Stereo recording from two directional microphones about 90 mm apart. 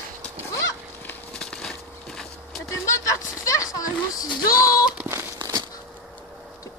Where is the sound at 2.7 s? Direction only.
35° left (ahead or behind).